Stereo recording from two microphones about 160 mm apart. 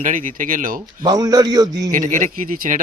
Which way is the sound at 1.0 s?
25° right (ahead or behind).